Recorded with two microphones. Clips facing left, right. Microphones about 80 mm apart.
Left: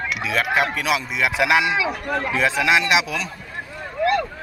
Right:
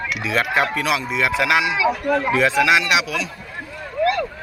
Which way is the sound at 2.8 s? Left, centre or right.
Left.